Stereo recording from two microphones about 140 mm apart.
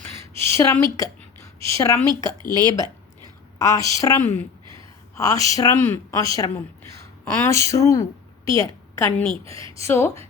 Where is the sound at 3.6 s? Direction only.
25° left (ahead or behind).